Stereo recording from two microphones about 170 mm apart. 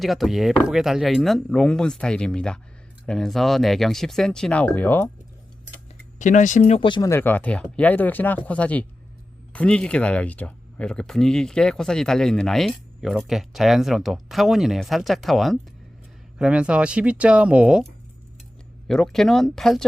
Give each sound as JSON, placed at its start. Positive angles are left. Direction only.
{"t": 0.0, "sound": "speech", "side_deg": 0}
{"t": 6.1, "sound": "speech", "side_deg": 45}
{"t": 6.8, "sound": "speech", "side_deg": 25}
{"t": 7.1, "sound": "speech", "side_deg": 10}
{"t": 18.9, "sound": "speech", "side_deg": 5}